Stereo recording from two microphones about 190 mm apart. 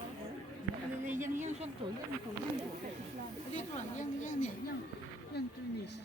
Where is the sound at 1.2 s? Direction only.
40° right (ahead or behind).